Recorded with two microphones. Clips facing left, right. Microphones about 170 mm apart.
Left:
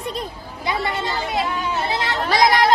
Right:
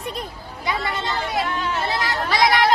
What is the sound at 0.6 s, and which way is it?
Speech, 30° left (ahead or behind).